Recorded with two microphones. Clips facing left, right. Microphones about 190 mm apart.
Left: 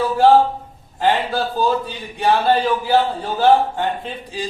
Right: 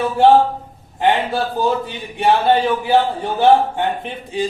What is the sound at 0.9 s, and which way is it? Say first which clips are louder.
A man's voice: right 1 dB; 20° right (ahead or behind).